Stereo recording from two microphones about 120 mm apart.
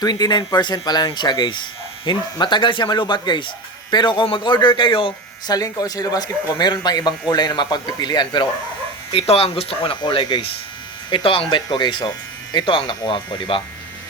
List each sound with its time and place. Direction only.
0.0 s speech: 35° left (ahead or behind)
5.5 s speech: 30° left (ahead or behind)
9.1 s speech: 55° left (ahead or behind)